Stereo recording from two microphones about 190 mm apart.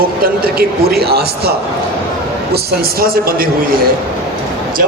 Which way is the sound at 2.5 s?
50° right (ahead or behind).